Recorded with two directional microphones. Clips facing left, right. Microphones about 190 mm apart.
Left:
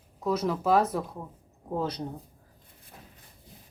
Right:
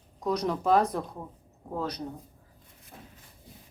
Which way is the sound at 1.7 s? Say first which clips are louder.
Left 3 dB; 25° left (ahead or behind).